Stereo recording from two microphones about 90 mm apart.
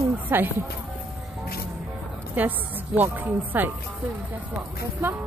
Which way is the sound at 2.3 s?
20° right (ahead or behind).